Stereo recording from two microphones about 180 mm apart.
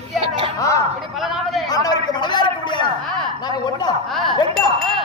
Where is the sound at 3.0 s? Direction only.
Centre (ahead or behind).